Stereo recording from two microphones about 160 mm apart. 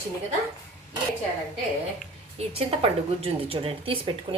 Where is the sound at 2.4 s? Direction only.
40° right (ahead or behind).